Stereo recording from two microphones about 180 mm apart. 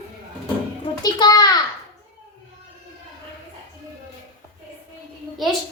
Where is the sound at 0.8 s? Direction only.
25° left (ahead or behind).